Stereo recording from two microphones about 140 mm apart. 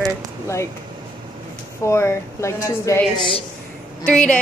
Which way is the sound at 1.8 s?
20° left (ahead or behind).